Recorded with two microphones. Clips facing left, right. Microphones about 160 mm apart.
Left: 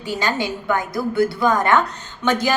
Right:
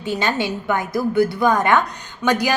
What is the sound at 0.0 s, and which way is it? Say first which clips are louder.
A woman's voice: right 1 dB; 20° right (ahead or behind).